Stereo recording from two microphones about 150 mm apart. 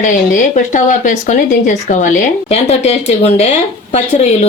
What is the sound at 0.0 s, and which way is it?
Speech, 55° left (ahead or behind).